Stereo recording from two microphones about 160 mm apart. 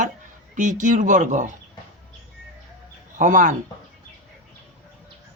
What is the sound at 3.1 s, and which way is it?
Speech, 55° right (ahead or behind).